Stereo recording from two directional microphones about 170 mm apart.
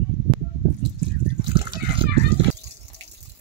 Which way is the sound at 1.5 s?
30° right (ahead or behind).